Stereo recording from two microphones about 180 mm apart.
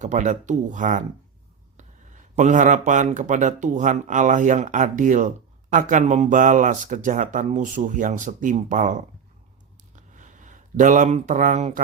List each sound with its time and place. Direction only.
0.0 s speech: 40° right (ahead or behind)
2.3 s speech: 45° right (ahead or behind)
9.9 s a sound: 45° right (ahead or behind)